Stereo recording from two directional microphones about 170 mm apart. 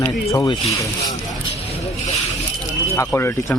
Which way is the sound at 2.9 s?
15° left (ahead or behind).